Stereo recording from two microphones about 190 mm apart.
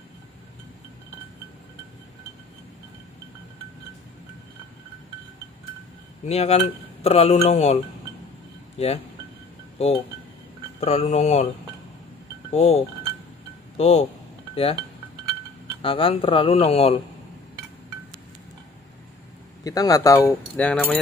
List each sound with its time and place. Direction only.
6.2 s speech: 35° left (ahead or behind)
10.8 s speech: 35° left (ahead or behind)
12.5 s speech: 30° left (ahead or behind)
15.8 s speech: 30° left (ahead or behind)
19.6 s speech: 20° left (ahead or behind)